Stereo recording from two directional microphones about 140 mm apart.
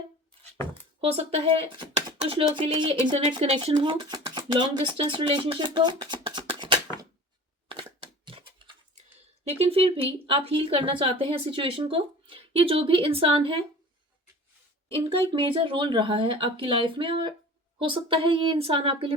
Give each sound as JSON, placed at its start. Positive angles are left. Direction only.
{"t": 1.0, "sound": "speech", "side_deg": -45}
{"t": 7.7, "sound": "a sound", "side_deg": -35}
{"t": 9.4, "sound": "speech", "side_deg": -45}
{"t": 14.9, "sound": "speech", "side_deg": -40}